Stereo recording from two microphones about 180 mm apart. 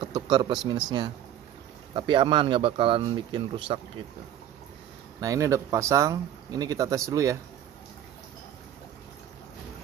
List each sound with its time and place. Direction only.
0.0 s a sound: 25° right (ahead or behind)
0.7 s speech: 25° right (ahead or behind)
5.2 s speech: 20° right (ahead or behind)